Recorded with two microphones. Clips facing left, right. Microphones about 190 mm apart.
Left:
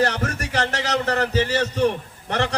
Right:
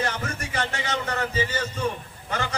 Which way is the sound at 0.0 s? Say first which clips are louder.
Left 6 dB; 75° left (ahead or behind).